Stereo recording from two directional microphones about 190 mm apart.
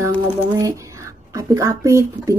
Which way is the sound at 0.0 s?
15° right (ahead or behind).